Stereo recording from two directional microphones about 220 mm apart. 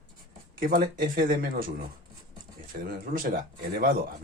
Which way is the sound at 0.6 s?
40° right (ahead or behind).